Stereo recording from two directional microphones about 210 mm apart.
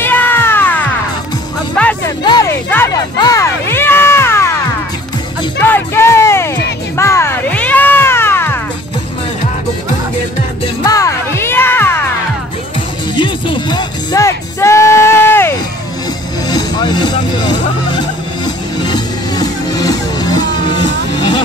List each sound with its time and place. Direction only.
0.0 s music: 10° left (ahead or behind)
2.2 s music: 20° left (ahead or behind)
5.6 s music: 10° left (ahead or behind)
10.8 s music: 15° left (ahead or behind)
13.1 s music: 20° left (ahead or behind)